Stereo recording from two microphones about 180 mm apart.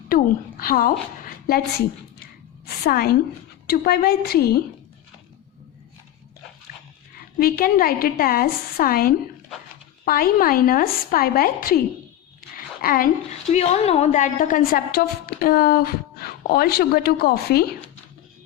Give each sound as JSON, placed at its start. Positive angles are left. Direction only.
{"t": 0.1, "sound": "a woman's voice", "side_deg": 55}
{"t": 2.6, "sound": "a woman's voice", "side_deg": 60}
{"t": 7.3, "sound": "a woman's voice", "side_deg": 55}
{"t": 12.4, "sound": "a sound", "side_deg": 55}
{"t": 13.5, "sound": "a woman's voice", "side_deg": 35}